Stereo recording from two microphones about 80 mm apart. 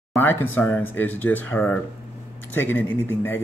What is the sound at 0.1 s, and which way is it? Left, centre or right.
A man's voice, left.